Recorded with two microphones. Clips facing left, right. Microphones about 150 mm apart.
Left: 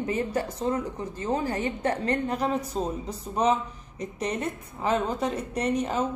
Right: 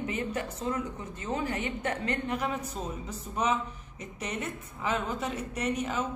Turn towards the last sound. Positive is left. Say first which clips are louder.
# left 5 dB
turn(degrees=35)  # may be behind; listen again after turning